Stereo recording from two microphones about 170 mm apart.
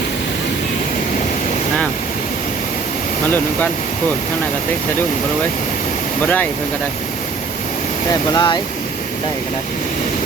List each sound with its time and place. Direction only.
3.2 s speech: 10° left (ahead or behind)
6.2 s speech: 10° left (ahead or behind)
8.3 s speech: 25° left (ahead or behind)